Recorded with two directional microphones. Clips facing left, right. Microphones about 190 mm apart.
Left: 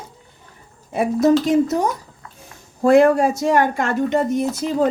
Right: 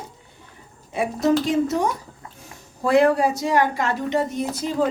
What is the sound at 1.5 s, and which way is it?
Speech, 40° left (ahead or behind).